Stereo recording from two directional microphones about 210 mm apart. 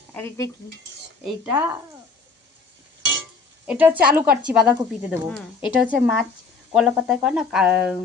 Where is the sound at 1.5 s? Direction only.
15° right (ahead or behind).